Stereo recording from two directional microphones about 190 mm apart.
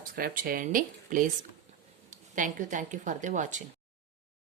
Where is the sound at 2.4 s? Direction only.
40° right (ahead or behind).